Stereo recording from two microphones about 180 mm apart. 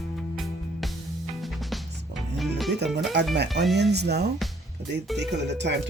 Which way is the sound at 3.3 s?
70° right (ahead or behind).